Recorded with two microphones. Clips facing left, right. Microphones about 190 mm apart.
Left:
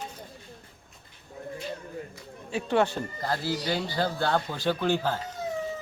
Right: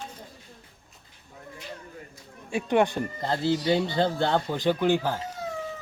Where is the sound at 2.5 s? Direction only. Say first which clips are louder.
Right 2 dB; 15° right (ahead or behind).